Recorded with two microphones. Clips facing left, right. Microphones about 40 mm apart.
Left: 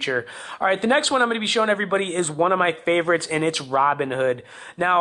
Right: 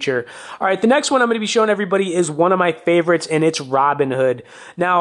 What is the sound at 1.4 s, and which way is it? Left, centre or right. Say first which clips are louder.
Speech: right 4 dB; centre.